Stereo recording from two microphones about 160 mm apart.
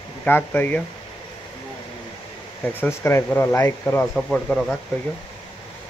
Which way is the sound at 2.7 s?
15° left (ahead or behind).